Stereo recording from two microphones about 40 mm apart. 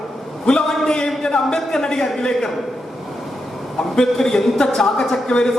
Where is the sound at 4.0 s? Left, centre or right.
Centre.